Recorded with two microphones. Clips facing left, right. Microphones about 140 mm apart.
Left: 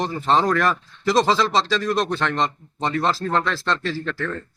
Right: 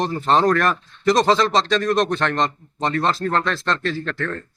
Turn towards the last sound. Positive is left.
turn(degrees=5)  # may be behind; listen again after turning